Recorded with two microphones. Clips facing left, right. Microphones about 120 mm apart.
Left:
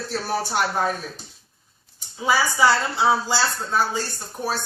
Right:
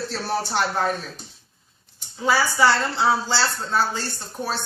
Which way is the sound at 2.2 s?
10° left (ahead or behind).